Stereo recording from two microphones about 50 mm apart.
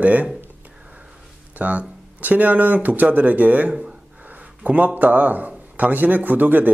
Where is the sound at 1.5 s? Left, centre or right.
Right.